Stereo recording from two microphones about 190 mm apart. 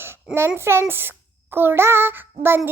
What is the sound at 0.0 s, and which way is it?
A child's voice, 10° right (ahead or behind).